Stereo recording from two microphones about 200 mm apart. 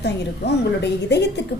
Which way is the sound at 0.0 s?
60° left (ahead or behind).